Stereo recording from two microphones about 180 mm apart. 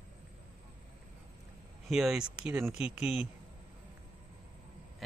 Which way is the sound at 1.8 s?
Centre (ahead or behind).